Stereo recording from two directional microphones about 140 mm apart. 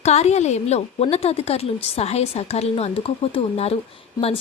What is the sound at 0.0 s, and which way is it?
Speech, 50° left (ahead or behind).